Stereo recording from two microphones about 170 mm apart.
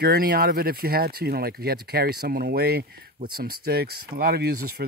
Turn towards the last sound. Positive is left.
turn(degrees=-65)  # may be behind; listen again after turning